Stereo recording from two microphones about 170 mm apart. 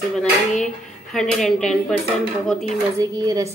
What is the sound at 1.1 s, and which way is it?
Speech, centre (ahead or behind).